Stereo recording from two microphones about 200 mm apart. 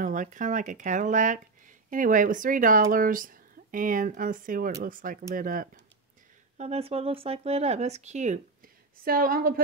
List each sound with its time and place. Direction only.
0.0 s a woman's voice: 40° right (ahead or behind)
6.6 s speech: 30° right (ahead or behind)
9.0 s a woman's voice: 45° right (ahead or behind)